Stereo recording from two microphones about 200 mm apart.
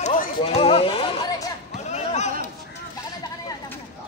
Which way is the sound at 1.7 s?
35° left (ahead or behind).